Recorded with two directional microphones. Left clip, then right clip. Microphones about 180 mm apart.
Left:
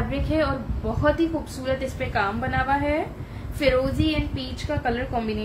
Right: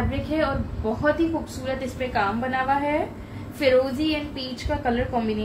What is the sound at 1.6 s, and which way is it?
A woman's voice, 35° left (ahead or behind).